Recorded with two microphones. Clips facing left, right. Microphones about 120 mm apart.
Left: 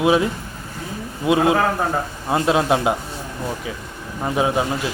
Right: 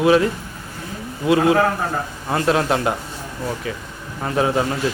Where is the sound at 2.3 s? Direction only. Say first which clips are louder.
Left 1 dB; 15° left (ahead or behind).